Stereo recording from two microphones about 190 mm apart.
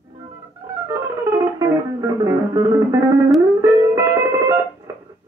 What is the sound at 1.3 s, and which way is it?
Music, 15° right (ahead or behind).